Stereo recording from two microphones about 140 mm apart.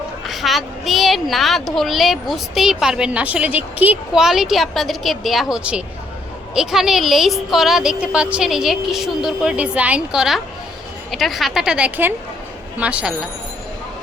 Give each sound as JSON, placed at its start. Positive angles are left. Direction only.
{"t": 0.3, "sound": "a woman's voice", "side_deg": 0}